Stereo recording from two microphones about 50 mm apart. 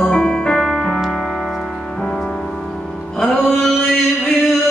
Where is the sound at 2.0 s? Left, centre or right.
Centre.